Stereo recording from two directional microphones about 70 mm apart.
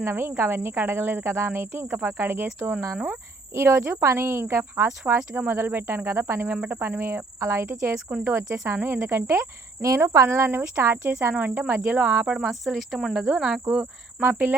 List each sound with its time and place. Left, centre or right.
0.0 s speech: right
3.5 s speech: right
11.7 s speech: centre
12.5 s speech: centre
14.2 s speech: right